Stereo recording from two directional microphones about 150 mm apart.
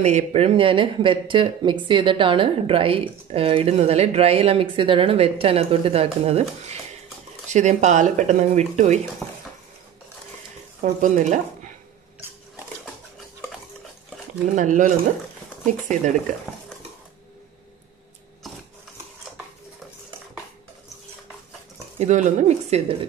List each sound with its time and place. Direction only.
0.0 s speech: 45° right (ahead or behind)
7.5 s speech: 50° right (ahead or behind)
10.8 s speech: 55° right (ahead or behind)
14.5 s speech: 60° right (ahead or behind)
21.9 s speech: 50° right (ahead or behind)